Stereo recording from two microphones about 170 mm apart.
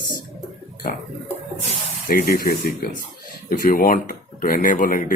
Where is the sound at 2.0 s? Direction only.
60° left (ahead or behind).